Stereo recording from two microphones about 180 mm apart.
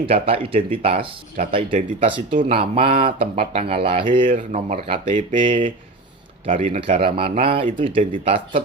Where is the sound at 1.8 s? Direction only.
45° right (ahead or behind).